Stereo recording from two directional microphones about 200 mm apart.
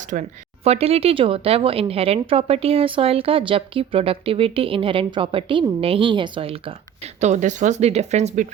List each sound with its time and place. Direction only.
0.1 s speech: 35° right (ahead or behind)